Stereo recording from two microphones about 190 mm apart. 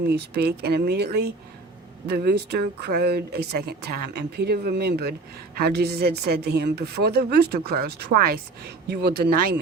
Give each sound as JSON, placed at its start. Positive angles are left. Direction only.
{"t": 0.1, "sound": "a woman's voice", "side_deg": -60}